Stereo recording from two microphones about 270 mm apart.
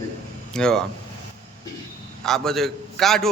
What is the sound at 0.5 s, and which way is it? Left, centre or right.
Speech, centre.